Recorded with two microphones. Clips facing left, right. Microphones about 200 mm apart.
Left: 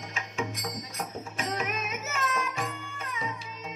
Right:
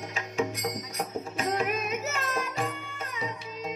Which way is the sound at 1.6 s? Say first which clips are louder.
Right 4 dB; 35° right (ahead or behind).